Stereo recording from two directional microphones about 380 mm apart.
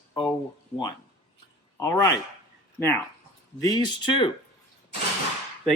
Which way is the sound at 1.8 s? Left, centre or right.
Centre.